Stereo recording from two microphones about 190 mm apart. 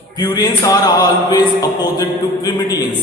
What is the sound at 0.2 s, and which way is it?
Speech, 20° left (ahead or behind).